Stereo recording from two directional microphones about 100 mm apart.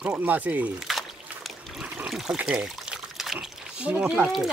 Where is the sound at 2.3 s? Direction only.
5° right (ahead or behind).